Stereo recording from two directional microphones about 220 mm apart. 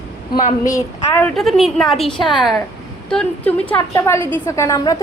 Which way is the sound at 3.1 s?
5° left (ahead or behind).